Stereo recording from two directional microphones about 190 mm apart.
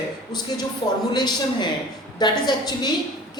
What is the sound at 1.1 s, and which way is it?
A woman's voice, 20° left (ahead or behind).